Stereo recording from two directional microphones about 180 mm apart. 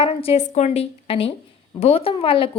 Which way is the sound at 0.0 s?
30° left (ahead or behind).